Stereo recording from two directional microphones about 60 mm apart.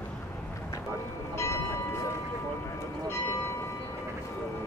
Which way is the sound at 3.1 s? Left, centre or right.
Left.